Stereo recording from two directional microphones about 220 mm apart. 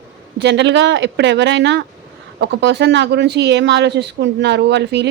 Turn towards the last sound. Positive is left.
turn(degrees=-50)  # may be behind; listen again after turning